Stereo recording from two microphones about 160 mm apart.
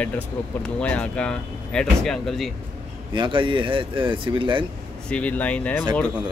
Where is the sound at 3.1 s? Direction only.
30° right (ahead or behind).